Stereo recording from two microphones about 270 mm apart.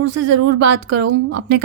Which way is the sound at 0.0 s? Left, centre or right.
Right.